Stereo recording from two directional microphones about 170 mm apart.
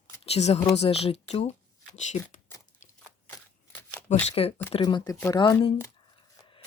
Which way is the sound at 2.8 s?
45° left (ahead or behind).